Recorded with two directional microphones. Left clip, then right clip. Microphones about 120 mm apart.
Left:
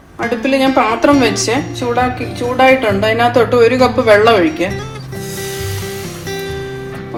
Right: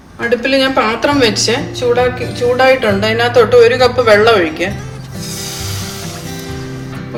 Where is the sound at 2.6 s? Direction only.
65° left (ahead or behind).